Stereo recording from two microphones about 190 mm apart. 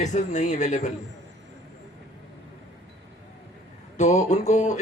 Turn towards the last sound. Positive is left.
turn(degrees=40)  # may be behind; listen again after turning